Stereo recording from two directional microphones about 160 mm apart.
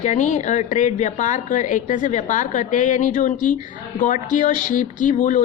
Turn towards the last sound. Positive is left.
turn(degrees=50)  # may be behind; listen again after turning